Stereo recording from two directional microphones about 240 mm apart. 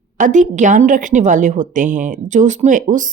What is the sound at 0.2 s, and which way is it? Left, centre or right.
A woman's voice, right.